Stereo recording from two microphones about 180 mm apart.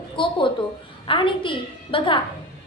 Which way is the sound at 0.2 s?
30° left (ahead or behind).